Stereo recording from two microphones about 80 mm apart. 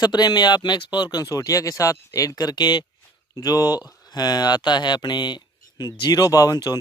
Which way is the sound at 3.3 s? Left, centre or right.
Left.